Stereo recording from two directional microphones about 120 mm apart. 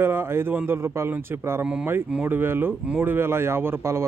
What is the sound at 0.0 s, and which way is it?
Speech, 20° right (ahead or behind).